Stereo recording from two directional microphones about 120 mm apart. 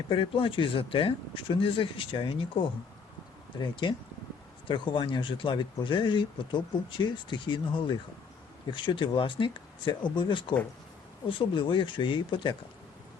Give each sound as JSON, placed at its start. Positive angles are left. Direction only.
{"t": 0.1, "sound": "speech", "side_deg": 50}